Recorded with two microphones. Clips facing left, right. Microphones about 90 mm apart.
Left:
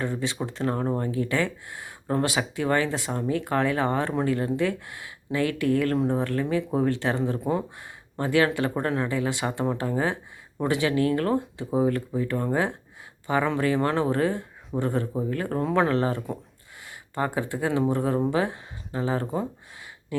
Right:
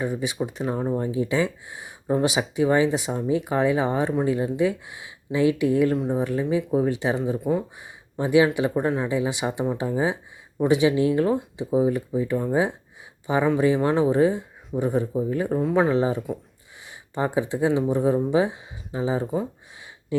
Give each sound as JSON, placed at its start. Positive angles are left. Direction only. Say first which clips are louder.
{"t": 0.0, "sound": "speech", "louder": "right 2 dB", "side_deg": -15}
{"t": 7.3, "sound": "speech", "louder": "right 2 dB", "side_deg": 0}
{"t": 8.2, "sound": "speech", "louder": "right 3 dB", "side_deg": -15}